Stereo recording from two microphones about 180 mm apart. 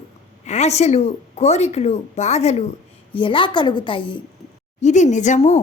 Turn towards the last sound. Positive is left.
turn(degrees=40)  # may be behind; listen again after turning